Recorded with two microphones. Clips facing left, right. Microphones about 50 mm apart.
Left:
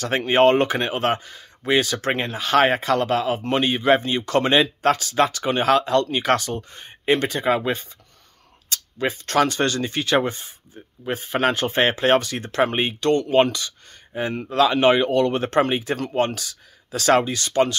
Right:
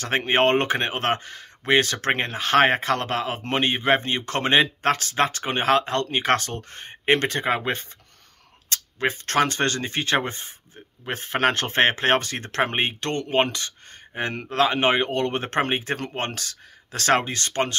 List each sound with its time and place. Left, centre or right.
0.0 s speech: right
14.1 s speech: right
14.6 s speech: right